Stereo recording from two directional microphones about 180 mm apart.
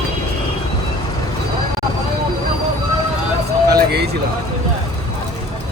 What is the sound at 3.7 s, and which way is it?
Speech, 60° right (ahead or behind).